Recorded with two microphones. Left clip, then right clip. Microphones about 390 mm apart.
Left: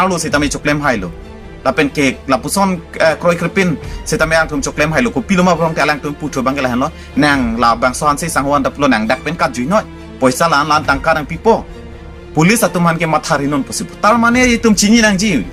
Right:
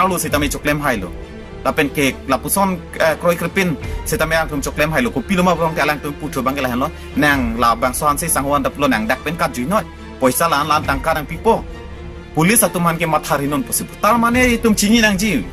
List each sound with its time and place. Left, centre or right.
0.0 s a man's voice: right